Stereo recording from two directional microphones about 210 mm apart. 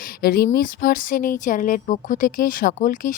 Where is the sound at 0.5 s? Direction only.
45° left (ahead or behind).